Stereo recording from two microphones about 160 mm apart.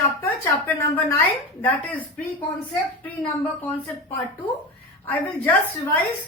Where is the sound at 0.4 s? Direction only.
10° left (ahead or behind).